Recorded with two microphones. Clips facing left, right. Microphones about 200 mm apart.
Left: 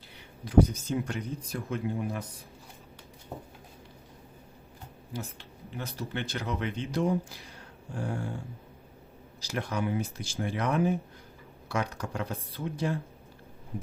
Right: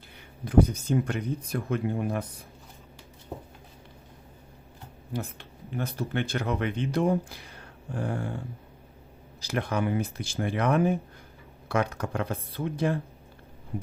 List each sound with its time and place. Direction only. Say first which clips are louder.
0.4 s speech: right 1 dB; 55° right (ahead or behind)
5.1 s speech: right 5 dB; 55° right (ahead or behind)
9.4 s speech: right 4 dB; 60° right (ahead or behind)